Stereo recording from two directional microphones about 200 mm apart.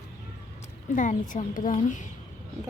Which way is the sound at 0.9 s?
40° left (ahead or behind).